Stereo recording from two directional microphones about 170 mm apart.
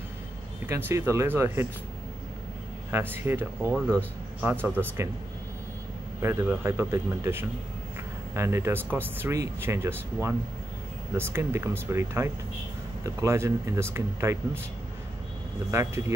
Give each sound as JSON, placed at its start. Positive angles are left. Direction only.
{"t": 0.7, "sound": "speech", "side_deg": -15}
{"t": 2.9, "sound": "speech", "side_deg": -15}
{"t": 6.2, "sound": "speech", "side_deg": -15}
{"t": 15.7, "sound": "speech", "side_deg": -15}